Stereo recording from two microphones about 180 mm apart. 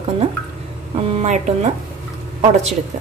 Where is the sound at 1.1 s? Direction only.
40° right (ahead or behind).